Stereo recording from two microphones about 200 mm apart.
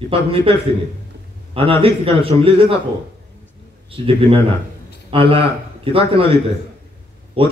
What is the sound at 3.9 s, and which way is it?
A man's voice, 25° right (ahead or behind).